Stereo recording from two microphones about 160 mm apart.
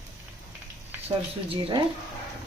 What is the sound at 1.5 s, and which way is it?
Speech, 35° right (ahead or behind).